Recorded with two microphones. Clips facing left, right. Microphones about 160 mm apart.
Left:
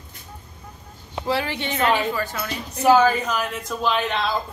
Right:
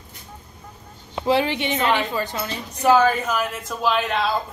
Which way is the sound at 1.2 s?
20° right (ahead or behind).